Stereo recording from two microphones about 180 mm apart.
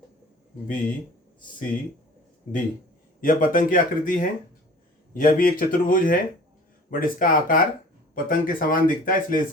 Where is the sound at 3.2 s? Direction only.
50° left (ahead or behind).